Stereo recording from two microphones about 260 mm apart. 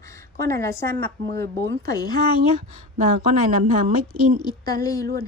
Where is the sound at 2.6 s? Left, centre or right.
Right.